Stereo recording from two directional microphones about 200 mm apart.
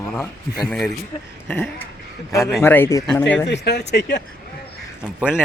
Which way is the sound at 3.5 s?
60° left (ahead or behind).